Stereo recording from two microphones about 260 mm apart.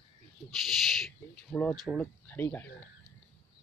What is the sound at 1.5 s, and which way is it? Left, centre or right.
Speech, centre.